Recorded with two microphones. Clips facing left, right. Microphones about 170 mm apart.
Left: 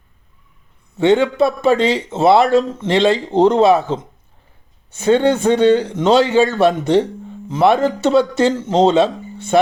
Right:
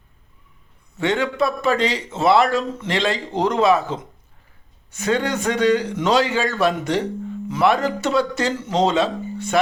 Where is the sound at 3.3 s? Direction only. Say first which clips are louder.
Left 5 dB; 25° left (ahead or behind).